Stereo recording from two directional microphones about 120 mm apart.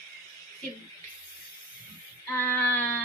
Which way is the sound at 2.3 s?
20° left (ahead or behind).